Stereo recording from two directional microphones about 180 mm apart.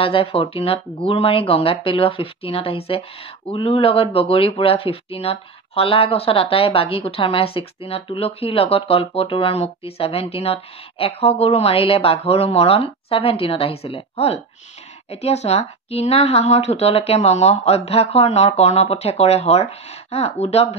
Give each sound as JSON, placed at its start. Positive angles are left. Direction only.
{"t": 0.0, "sound": "speech", "side_deg": 30}